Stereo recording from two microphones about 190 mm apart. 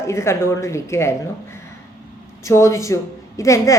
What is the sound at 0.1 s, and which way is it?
A woman's voice, 15° left (ahead or behind).